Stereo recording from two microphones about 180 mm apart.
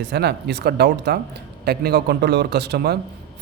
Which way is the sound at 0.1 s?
65° right (ahead or behind).